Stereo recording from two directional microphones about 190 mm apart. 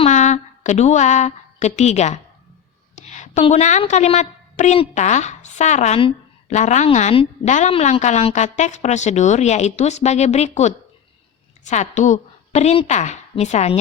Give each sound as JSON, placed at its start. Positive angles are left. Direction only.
{"t": 0.0, "sound": "a woman's voice", "side_deg": 40}